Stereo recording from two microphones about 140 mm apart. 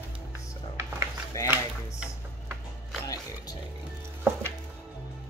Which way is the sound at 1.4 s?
25° left (ahead or behind).